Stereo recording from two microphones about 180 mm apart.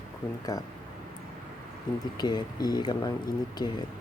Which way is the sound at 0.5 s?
20° left (ahead or behind).